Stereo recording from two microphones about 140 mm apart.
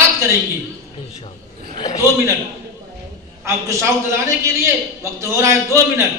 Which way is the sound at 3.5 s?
20° right (ahead or behind).